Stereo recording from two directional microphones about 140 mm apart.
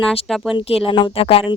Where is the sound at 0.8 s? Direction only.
40° left (ahead or behind).